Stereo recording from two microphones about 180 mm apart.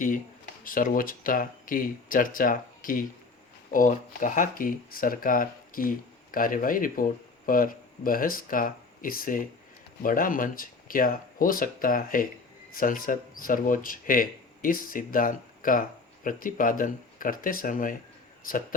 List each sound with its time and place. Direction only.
0.6 s speech: 50° left (ahead or behind)